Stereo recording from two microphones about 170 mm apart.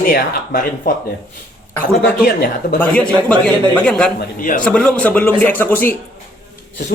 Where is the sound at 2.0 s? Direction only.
70° left (ahead or behind).